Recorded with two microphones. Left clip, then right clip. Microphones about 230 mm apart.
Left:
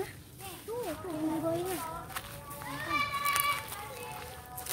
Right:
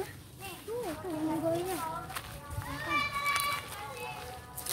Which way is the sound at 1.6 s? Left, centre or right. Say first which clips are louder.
Right 1 dB; centre.